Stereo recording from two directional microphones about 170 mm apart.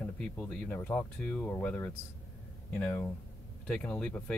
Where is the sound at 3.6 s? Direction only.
5° left (ahead or behind).